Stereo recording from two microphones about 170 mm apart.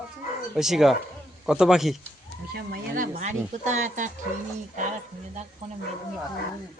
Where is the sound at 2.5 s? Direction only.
60° right (ahead or behind).